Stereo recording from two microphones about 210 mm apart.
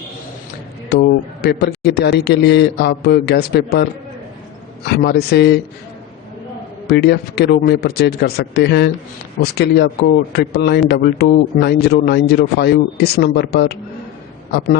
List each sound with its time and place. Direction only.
0.9 s speech: 50° left (ahead or behind)
4.9 s speech: 50° left (ahead or behind)
6.8 s speech: 50° left (ahead or behind)